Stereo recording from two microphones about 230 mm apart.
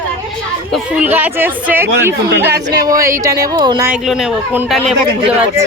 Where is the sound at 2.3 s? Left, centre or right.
Right.